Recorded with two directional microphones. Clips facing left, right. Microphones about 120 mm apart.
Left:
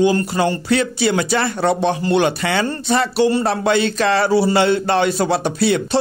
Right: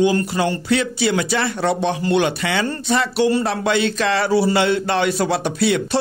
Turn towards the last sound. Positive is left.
turn(degrees=35)  # may be behind; listen again after turning